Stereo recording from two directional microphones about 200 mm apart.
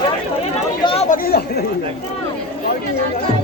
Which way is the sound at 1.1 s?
50° left (ahead or behind).